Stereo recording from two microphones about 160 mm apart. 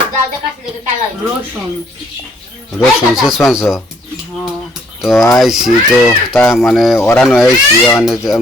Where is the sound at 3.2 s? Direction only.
Centre (ahead or behind).